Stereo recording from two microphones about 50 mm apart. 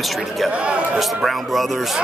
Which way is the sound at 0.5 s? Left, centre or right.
Right.